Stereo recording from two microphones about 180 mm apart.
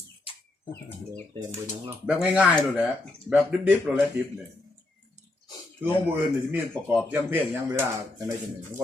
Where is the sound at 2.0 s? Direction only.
5° right (ahead or behind).